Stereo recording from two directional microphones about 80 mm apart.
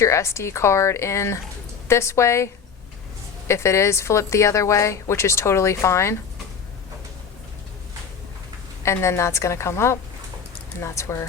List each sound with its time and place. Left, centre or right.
0.0 s a woman's voice: left
8.8 s a woman's voice: left